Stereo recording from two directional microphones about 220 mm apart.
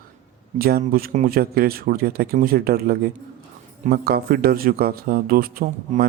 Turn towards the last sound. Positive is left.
turn(degrees=-40)  # may be behind; listen again after turning